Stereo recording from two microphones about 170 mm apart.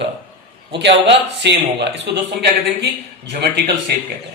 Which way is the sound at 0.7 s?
90° right.